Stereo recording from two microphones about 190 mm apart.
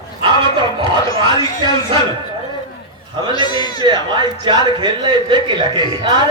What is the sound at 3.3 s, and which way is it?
Speech, 20° left (ahead or behind).